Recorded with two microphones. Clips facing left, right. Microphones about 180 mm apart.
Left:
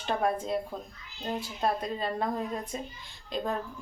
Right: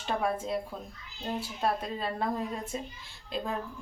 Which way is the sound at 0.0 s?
Centre (ahead or behind).